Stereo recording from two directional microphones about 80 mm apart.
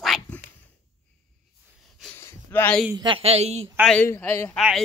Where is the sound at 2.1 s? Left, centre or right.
Left.